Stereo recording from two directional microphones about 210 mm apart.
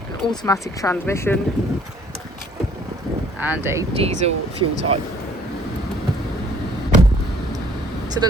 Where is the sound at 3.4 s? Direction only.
10° right (ahead or behind).